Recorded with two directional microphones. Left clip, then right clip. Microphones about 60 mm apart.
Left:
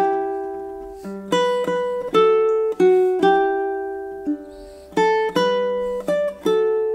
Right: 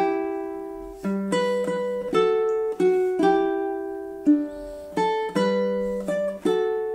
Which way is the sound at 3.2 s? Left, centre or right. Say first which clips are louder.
Left 4 dB; centre.